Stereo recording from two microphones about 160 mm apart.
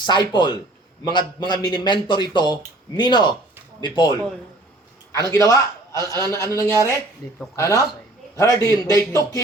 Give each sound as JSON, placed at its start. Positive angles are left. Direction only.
{"t": 0.0, "sound": "a man's voice", "side_deg": 25}
{"t": 5.1, "sound": "a man's voice", "side_deg": 20}